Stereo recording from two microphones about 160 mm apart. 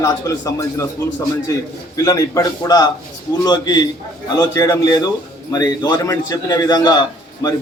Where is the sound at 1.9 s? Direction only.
20° left (ahead or behind).